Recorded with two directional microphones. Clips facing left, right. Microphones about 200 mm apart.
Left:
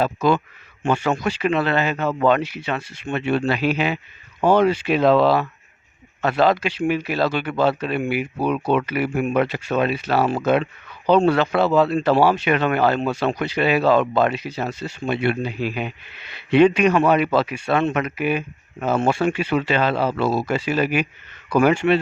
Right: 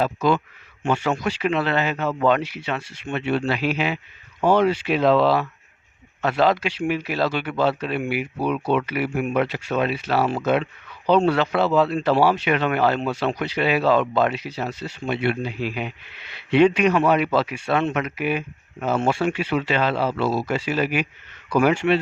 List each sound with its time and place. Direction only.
0.0 s speech: 50° left (ahead or behind)